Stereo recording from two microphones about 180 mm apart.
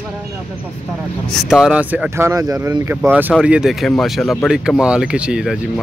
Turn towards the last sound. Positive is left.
turn(degrees=-5)  # may be behind; listen again after turning